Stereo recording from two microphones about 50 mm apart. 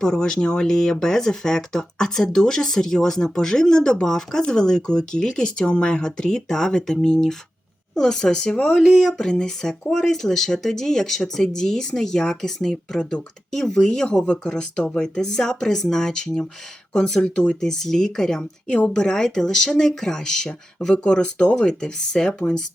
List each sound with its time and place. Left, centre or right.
0.0 s speech: centre
17.6 s speech: centre